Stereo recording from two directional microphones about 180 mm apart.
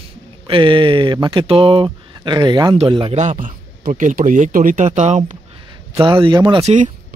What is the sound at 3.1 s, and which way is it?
Speech, 40° right (ahead or behind).